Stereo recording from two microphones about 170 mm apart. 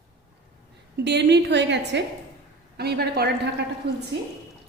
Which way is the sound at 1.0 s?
90° right.